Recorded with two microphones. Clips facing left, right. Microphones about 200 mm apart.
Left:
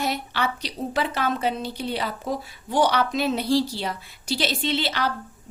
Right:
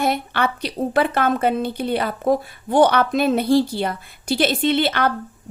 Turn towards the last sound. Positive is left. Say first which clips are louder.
# right 7 dB
turn(degrees=-55)  # may be behind; listen again after turning